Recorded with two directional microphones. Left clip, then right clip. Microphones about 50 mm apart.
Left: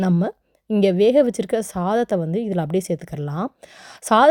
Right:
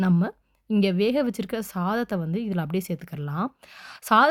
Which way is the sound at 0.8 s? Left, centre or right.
Left.